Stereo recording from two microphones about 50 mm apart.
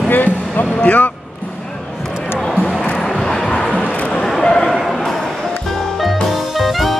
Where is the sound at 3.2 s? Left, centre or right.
Centre.